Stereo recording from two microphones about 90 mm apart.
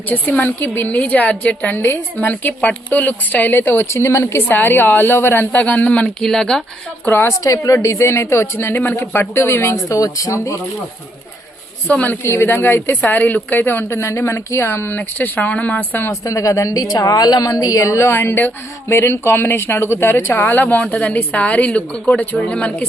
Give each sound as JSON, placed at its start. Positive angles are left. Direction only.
{"t": 0.1, "sound": "a woman's voice", "side_deg": 20}
{"t": 3.8, "sound": "a woman's voice", "side_deg": 30}
{"t": 7.0, "sound": "a woman's voice", "side_deg": 25}
{"t": 7.4, "sound": "a woman's voice", "side_deg": 40}
{"t": 11.9, "sound": "a woman's voice", "side_deg": 15}
{"t": 16.2, "sound": "a woman's voice", "side_deg": 35}